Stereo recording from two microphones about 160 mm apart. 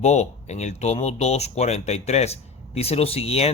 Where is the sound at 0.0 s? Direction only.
45° left (ahead or behind).